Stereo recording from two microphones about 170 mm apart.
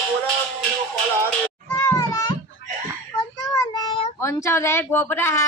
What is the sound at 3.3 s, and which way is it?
Child singing, 20° left (ahead or behind).